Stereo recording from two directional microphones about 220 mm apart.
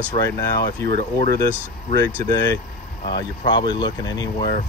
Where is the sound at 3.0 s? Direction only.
20° left (ahead or behind).